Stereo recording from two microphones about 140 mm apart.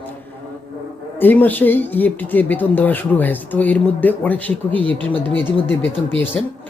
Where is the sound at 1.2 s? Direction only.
15° left (ahead or behind).